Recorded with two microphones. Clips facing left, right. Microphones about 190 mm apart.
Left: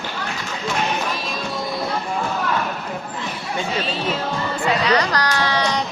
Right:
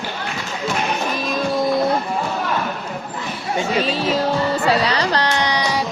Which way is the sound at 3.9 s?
40° right (ahead or behind).